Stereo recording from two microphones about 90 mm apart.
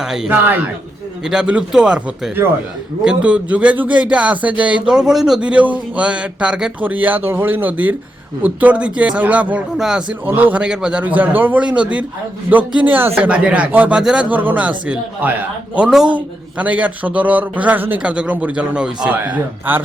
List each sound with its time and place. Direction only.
0.0 s a man's voice: 5° right (ahead or behind)
0.3 s a man's voice: 20° right (ahead or behind)
1.2 s a man's voice: 5° right (ahead or behind)
9.7 s a man's voice: 5° right (ahead or behind)
10.2 s a man's voice: 20° right (ahead or behind)
14.3 s a man's voice: 20° right (ahead or behind)